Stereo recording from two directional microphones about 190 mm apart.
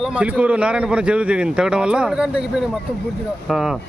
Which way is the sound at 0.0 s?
5° right (ahead or behind).